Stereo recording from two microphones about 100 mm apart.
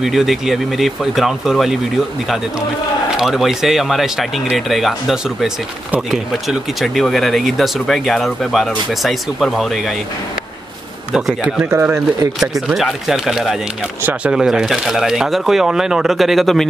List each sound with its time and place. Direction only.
0.0 s speech: 5° right (ahead or behind)
3.2 s speech: 5° right (ahead or behind)
11.1 s speech: 5° right (ahead or behind)
11.7 s speech: 20° right (ahead or behind)
12.6 s speech: 5° right (ahead or behind)